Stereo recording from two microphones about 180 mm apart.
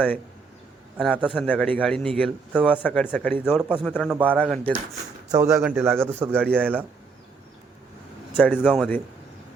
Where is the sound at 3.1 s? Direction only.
5° left (ahead or behind).